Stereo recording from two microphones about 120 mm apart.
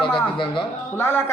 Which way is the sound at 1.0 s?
20° left (ahead or behind).